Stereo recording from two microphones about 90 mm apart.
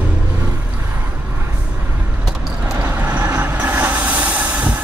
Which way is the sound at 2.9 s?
20° right (ahead or behind).